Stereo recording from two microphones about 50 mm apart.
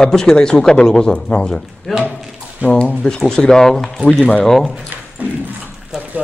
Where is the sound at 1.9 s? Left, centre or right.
Centre.